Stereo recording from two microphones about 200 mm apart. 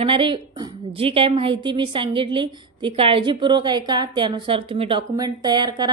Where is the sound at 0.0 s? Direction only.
25° right (ahead or behind).